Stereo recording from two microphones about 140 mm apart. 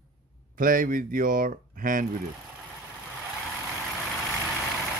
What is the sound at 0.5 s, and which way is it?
Speech, 85° right.